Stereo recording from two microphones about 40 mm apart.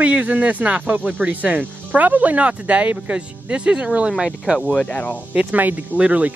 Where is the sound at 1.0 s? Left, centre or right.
Right.